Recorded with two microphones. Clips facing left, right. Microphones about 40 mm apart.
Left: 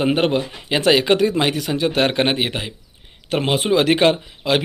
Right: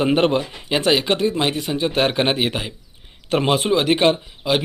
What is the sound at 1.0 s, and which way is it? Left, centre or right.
Speech, left.